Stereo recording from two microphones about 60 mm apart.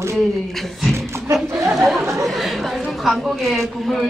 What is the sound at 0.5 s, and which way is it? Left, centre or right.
A woman's voice, centre.